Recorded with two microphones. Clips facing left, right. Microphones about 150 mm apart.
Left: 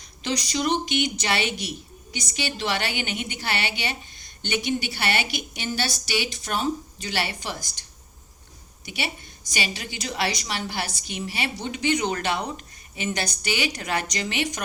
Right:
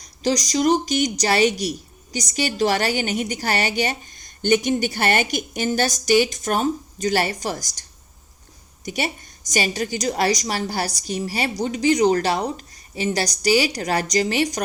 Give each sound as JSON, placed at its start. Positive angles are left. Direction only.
{"t": 0.0, "sound": "a woman's voice", "side_deg": -40}